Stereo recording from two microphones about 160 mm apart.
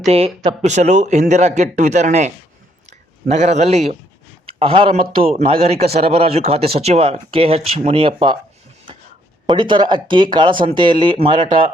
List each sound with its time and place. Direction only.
0.0 s a man's voice: 40° right (ahead or behind)
9.5 s speech: 30° right (ahead or behind)